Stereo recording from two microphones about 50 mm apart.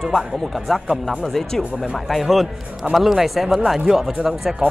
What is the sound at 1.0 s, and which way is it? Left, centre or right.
Speech, centre.